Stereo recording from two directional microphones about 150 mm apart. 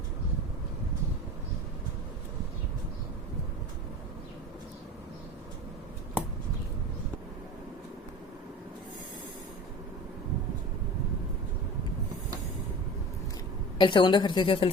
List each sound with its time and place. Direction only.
13.7 s a woman's voice: 30° left (ahead or behind)